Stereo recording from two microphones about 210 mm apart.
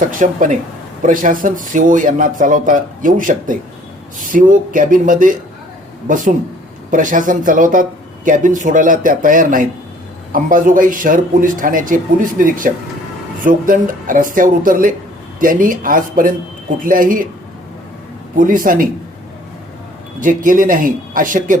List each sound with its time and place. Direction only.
0.1 s speech: 40° right (ahead or behind)
18.3 s speech: 40° right (ahead or behind)
20.1 s speech: 40° right (ahead or behind)